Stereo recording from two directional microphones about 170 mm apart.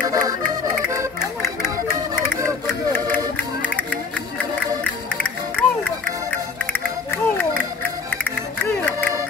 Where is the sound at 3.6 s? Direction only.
10° left (ahead or behind).